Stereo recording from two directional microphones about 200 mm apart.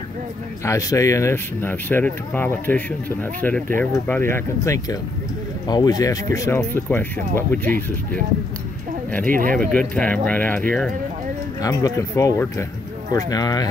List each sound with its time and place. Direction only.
0.7 s speech: 15° left (ahead or behind)
9.2 s speech: 45° right (ahead or behind)
9.7 s speech: 5° left (ahead or behind)
11.6 s speech: 15° left (ahead or behind)